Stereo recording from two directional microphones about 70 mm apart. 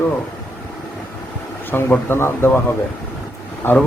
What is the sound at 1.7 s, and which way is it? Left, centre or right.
Speech, left.